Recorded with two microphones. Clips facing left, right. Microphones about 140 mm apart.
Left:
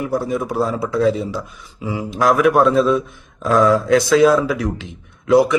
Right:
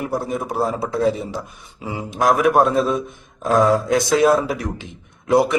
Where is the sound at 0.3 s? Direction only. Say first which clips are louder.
Left 2 dB; 50° right (ahead or behind).